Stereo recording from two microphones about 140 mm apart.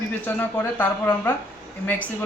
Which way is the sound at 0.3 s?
15° left (ahead or behind).